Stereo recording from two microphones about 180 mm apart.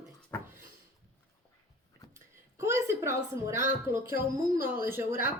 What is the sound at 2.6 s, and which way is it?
A woman's voice, 15° right (ahead or behind).